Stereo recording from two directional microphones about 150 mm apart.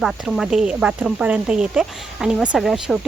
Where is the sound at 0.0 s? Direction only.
5° right (ahead or behind).